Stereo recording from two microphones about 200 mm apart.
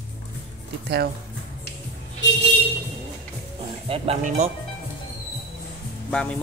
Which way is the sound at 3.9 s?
35° right (ahead or behind).